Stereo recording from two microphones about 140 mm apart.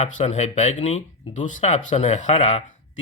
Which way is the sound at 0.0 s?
50° left (ahead or behind).